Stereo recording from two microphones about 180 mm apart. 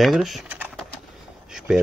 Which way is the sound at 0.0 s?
Centre (ahead or behind).